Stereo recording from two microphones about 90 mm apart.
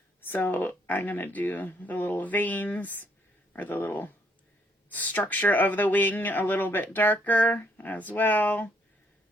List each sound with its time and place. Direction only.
0.3 s speech: 20° left (ahead or behind)